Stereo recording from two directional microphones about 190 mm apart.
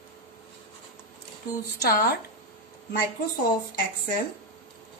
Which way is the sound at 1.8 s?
50° left (ahead or behind).